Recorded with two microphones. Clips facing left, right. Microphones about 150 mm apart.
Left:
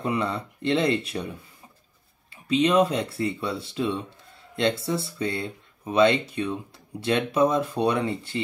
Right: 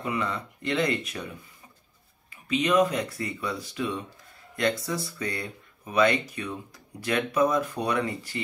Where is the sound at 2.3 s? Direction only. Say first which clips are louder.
Left 3 dB; 30° left (ahead or behind).